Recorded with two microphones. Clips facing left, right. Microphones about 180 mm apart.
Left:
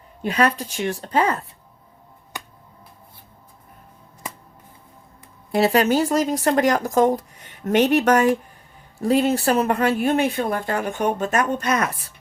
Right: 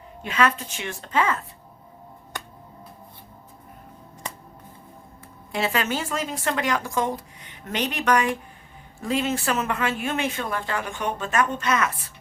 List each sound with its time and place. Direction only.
0.2 s speech: 35° left (ahead or behind)
5.5 s speech: 40° left (ahead or behind)